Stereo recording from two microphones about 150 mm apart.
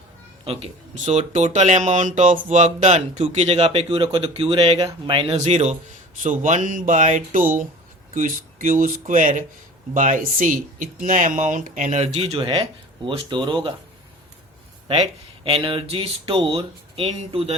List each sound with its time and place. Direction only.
0.4 s speech: 40° right (ahead or behind)
6.2 s speech: 60° right (ahead or behind); by 13.7 s 30° right (ahead or behind)
15.4 s speech: 35° right (ahead or behind)